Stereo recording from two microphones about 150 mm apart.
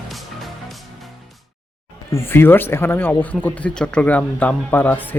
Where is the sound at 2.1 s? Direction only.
15° left (ahead or behind).